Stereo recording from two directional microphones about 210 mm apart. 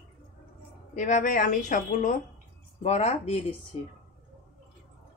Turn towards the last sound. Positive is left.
turn(degrees=30)  # may be behind; listen again after turning